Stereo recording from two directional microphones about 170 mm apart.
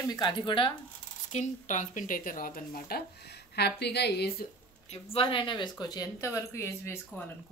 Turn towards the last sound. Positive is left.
turn(degrees=15)  # may be behind; listen again after turning